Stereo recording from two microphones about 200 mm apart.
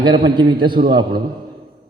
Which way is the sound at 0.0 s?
25° right (ahead or behind).